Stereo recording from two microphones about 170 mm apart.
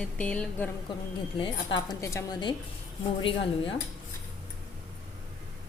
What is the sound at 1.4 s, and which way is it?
Speech, 25° left (ahead or behind).